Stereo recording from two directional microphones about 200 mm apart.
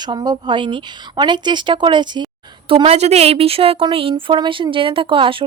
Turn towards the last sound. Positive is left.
turn(degrees=-25)  # may be behind; listen again after turning